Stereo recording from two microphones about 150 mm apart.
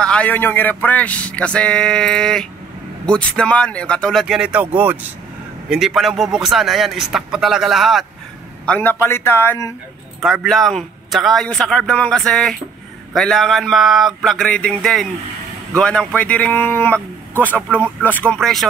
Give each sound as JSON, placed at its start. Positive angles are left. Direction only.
{"t": 0.0, "sound": "a man's voice", "side_deg": 10}
{"t": 8.6, "sound": "a man's voice", "side_deg": 10}
{"t": 10.2, "sound": "a man's voice", "side_deg": 0}